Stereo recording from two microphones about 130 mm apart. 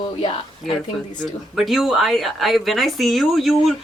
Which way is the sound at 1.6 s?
Centre (ahead or behind).